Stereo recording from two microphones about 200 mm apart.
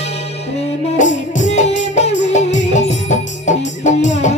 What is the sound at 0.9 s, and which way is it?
Music, 40° left (ahead or behind).